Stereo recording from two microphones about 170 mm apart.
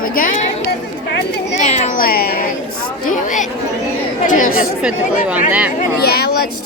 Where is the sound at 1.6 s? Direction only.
45° left (ahead or behind); by 2.4 s 60° left (ahead or behind).